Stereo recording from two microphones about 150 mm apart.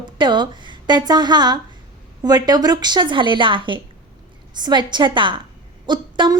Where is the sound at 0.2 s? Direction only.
30° right (ahead or behind).